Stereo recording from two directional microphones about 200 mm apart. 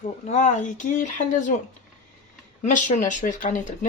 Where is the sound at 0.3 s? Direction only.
35° left (ahead or behind).